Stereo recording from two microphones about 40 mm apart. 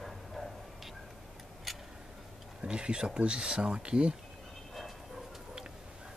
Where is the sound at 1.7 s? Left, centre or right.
Centre.